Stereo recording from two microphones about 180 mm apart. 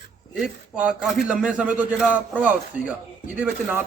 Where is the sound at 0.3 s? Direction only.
5° right (ahead or behind).